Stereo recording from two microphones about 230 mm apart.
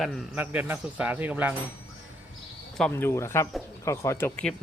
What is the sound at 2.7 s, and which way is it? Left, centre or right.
Speech, centre.